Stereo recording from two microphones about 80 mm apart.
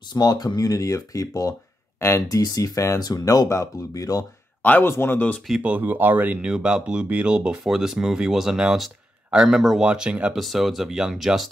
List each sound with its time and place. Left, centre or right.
0.1 s speech: left
2.0 s speech: left
2.2 s speech: left
4.6 s speech: left
5.6 s speech: centre
10.3 s speech: centre